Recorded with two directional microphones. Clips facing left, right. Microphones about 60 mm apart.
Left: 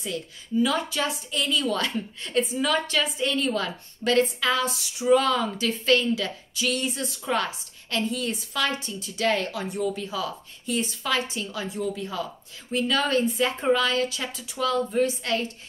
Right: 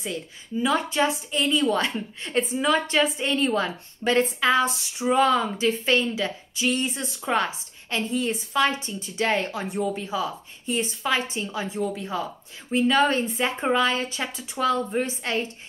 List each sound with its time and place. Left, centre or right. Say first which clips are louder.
0.0 s a woman's voice: even; right